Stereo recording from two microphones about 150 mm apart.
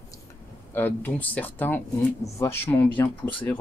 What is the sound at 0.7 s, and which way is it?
Speech, 15° left (ahead or behind).